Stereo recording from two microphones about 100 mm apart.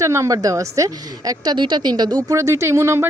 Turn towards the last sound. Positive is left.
turn(degrees=-25)  # may be behind; listen again after turning